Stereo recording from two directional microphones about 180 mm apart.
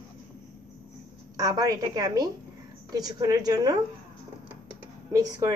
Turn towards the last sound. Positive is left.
turn(degrees=-20)  # may be behind; listen again after turning